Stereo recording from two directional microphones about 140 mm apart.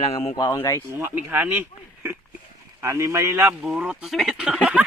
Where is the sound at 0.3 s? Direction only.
25° left (ahead or behind).